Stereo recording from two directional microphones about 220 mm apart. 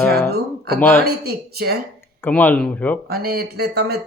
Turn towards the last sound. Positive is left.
turn(degrees=-45)  # may be behind; listen again after turning